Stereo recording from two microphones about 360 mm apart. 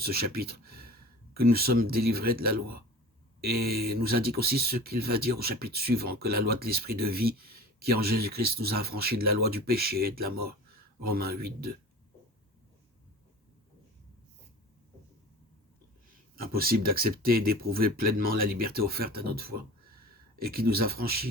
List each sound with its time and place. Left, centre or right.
0.0 s speech: right
16.3 s speech: right